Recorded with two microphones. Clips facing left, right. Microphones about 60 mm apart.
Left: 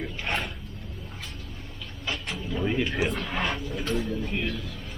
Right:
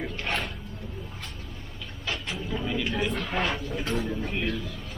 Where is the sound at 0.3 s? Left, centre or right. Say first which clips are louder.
Left 1 dB; centre.